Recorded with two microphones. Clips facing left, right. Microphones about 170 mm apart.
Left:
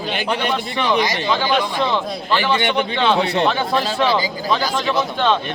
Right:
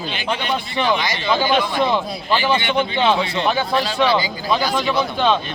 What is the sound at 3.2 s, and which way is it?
Speech, 60° left (ahead or behind).